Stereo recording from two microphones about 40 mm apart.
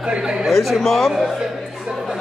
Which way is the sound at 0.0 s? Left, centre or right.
Centre.